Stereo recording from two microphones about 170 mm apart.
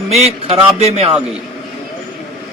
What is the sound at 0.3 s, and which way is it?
Speech, 35° right (ahead or behind).